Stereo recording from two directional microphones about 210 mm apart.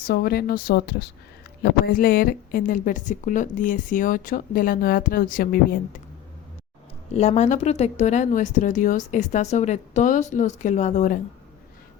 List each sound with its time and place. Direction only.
0.1 s a woman's voice: 45° left (ahead or behind)
7.1 s speech: 30° left (ahead or behind)